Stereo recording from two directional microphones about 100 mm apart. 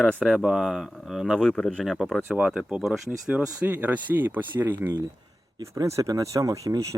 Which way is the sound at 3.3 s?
15° right (ahead or behind).